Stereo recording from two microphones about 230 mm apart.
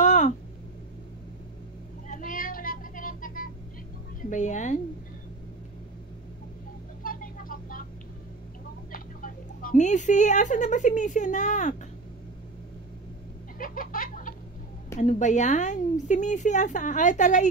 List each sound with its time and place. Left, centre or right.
0.0 s a sound: left
2.0 s cat: left
4.2 s a woman's voice: left
7.0 s vehicle: left
8.9 s speech: left
13.6 s a sound: left
15.0 s a woman's voice: left